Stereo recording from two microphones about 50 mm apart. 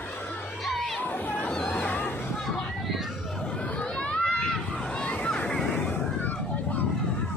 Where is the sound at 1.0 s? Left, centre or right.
Left.